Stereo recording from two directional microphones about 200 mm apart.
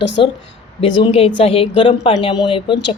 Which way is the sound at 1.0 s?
30° left (ahead or behind).